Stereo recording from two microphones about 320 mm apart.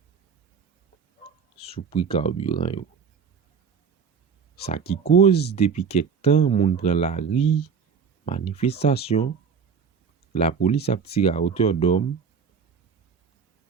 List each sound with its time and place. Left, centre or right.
1.6 s speech: centre
4.8 s speech: left
5.5 s speech: centre
10.3 s speech: centre